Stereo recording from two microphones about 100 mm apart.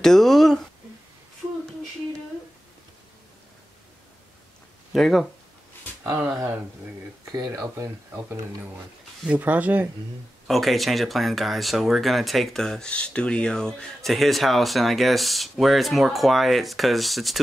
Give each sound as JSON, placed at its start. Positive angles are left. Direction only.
{"t": 0.0, "sound": "speech", "side_deg": 5}
{"t": 4.9, "sound": "speech", "side_deg": 0}
{"t": 7.3, "sound": "speech", "side_deg": -35}
{"t": 9.2, "sound": "speech", "side_deg": -15}
{"t": 10.4, "sound": "speech", "side_deg": 0}